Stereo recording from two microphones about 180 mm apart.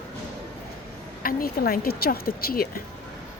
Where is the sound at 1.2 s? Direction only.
55° left (ahead or behind).